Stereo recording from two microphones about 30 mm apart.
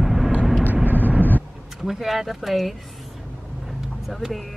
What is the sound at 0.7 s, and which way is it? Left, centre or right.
Vehicle, right.